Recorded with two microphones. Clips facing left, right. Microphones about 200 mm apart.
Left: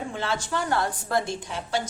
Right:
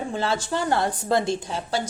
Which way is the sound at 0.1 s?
35° right (ahead or behind).